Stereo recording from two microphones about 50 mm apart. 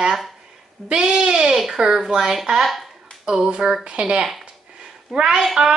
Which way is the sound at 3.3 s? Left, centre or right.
Centre.